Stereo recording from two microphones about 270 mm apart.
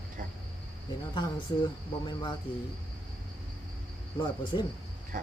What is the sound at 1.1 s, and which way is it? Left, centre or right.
Speech, centre.